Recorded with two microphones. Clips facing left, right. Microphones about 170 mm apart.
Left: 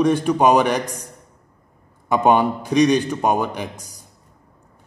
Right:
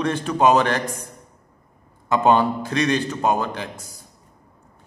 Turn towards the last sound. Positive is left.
turn(degrees=15)  # may be behind; listen again after turning